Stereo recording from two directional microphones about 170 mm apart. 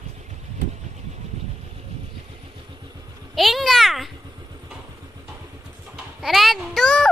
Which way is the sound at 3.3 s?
Centre (ahead or behind).